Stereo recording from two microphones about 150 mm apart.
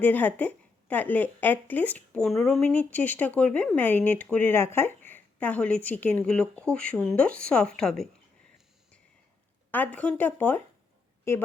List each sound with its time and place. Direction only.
0.0 s speech: 10° left (ahead or behind)
9.7 s speech: 10° left (ahead or behind)